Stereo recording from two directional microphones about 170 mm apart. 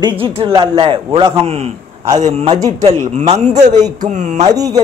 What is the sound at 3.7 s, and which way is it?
Speech, 25° right (ahead or behind).